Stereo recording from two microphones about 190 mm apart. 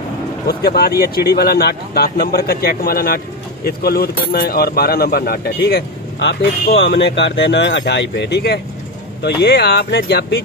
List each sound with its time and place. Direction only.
0.5 s speech: 55° left (ahead or behind)